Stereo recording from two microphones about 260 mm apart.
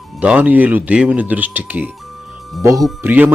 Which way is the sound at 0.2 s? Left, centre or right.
Centre.